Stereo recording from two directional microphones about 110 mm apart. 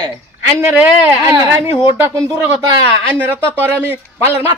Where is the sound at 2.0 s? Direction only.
25° right (ahead or behind).